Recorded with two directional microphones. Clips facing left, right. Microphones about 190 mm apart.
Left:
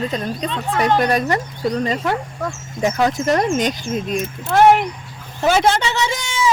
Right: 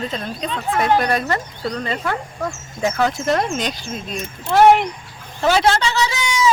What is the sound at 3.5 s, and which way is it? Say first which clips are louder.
Speech: left 5 dB; 45° left (ahead or behind).